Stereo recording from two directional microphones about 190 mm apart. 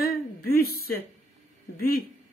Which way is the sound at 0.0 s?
55° left (ahead or behind).